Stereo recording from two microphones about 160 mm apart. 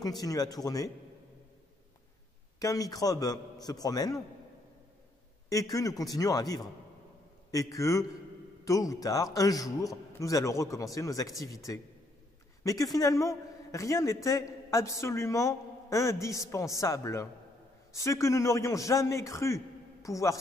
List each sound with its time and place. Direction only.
0.0 s a man's voice: 25° left (ahead or behind)
2.6 s a man's voice: 20° left (ahead or behind)
5.5 s a man's voice: 20° left (ahead or behind)